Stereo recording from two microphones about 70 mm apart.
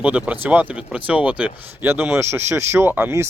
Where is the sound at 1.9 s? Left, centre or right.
Right.